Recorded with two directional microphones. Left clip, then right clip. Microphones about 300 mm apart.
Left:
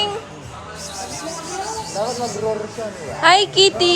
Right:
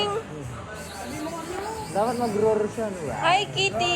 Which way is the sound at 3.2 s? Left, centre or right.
Left.